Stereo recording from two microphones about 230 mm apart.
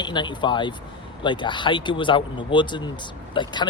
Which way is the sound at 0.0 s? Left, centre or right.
Centre.